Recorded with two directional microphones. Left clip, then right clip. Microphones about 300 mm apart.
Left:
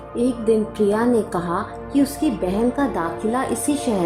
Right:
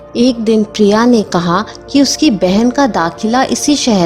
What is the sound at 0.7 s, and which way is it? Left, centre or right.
Speech, right.